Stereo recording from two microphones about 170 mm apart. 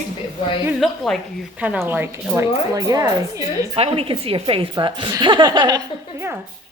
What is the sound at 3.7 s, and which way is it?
A woman's voice, 35° right (ahead or behind).